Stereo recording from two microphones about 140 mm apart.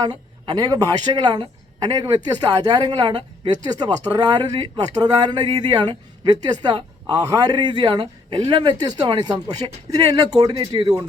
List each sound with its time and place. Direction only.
0.0 s a woman's voice: 30° right (ahead or behind)
10.6 s a woman's voice: 40° right (ahead or behind)